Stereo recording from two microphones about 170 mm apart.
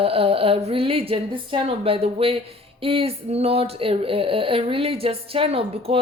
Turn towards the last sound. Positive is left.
turn(degrees=-35)  # may be behind; listen again after turning